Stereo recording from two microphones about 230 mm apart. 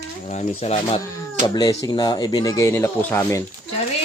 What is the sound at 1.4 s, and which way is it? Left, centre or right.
Speech, centre.